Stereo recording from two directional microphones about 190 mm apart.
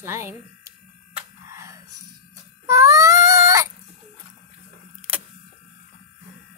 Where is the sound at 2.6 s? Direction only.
15° right (ahead or behind).